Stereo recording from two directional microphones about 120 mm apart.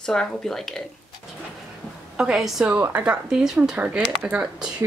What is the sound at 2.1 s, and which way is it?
Speech, 5° right (ahead or behind).